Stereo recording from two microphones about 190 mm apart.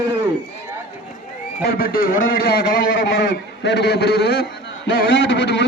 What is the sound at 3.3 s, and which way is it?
A man's voice, 65° left (ahead or behind).